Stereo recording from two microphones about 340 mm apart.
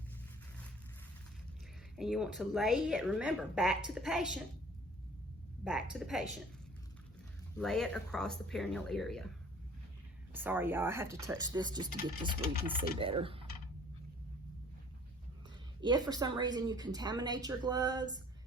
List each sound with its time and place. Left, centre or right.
2.0 s a woman's voice: centre
5.6 s a woman's voice: centre
7.5 s a woman's voice: centre
10.3 s speech: centre
13.1 s typing: centre
15.8 s speech: centre